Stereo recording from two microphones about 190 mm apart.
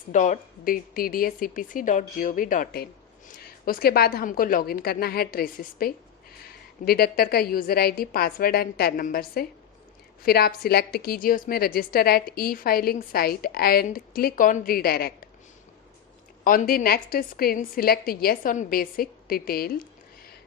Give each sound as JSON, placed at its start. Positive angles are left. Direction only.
{"t": 0.1, "sound": "a woman's voice", "side_deg": 40}
{"t": 16.4, "sound": "a woman's voice", "side_deg": 50}